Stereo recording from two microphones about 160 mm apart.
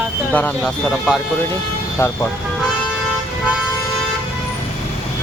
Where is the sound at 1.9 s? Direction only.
15° left (ahead or behind).